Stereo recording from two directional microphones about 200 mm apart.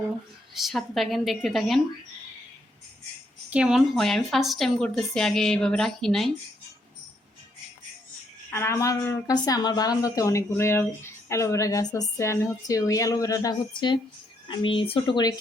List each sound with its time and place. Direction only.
0.5 s a woman's voice: centre (ahead or behind)
3.5 s a woman's voice: 5° right (ahead or behind)
8.4 s a woman's voice: 10° left (ahead or behind)